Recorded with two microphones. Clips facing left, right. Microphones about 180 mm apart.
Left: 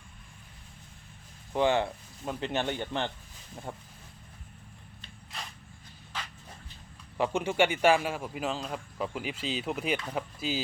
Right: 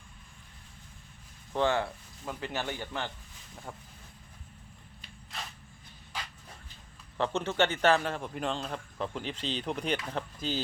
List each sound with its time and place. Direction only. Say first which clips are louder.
1.5 s speech: left 2 dB; 15° left (ahead or behind)
7.2 s a man's voice: left 2 dB; 10° left (ahead or behind)